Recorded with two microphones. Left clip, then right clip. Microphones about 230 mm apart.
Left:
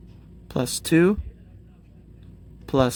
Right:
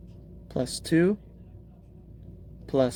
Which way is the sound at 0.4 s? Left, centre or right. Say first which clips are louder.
Left 4 dB; left.